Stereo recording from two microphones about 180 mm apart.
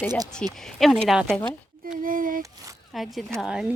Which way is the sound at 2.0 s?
50° right (ahead or behind).